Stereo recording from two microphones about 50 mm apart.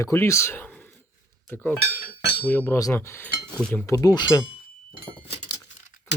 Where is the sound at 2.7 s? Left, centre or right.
Left.